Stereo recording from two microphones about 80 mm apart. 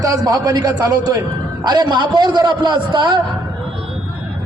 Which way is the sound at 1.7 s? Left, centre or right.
Right.